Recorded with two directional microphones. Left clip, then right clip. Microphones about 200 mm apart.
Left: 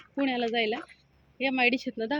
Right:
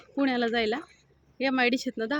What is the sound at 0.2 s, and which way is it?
Speech, 25° right (ahead or behind).